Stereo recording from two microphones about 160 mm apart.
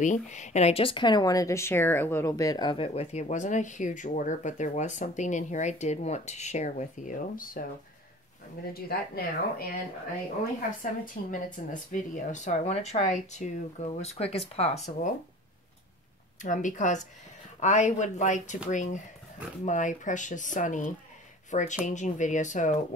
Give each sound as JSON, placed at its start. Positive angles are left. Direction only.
{"t": 0.0, "sound": "speech", "side_deg": 50}
{"t": 8.7, "sound": "a woman's voice", "side_deg": 70}
{"t": 10.8, "sound": "speech", "side_deg": 55}
{"t": 16.4, "sound": "speech", "side_deg": 50}